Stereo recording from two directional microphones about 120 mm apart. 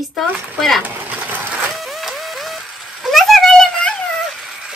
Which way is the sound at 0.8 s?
15° right (ahead or behind).